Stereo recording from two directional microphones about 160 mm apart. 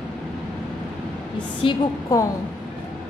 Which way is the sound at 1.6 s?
30° left (ahead or behind).